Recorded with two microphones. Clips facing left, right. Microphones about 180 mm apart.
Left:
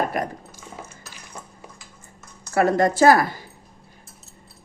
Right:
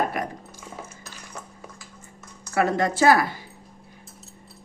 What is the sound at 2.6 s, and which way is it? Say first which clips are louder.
Speech: left 4 dB; 40° left (ahead or behind).